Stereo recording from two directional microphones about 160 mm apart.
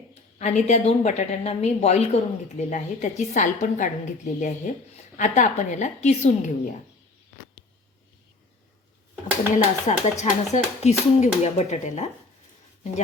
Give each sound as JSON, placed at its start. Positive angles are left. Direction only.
{"t": 0.1, "sound": "a woman's voice", "side_deg": 45}
{"t": 9.8, "sound": "a woman's voice", "side_deg": 45}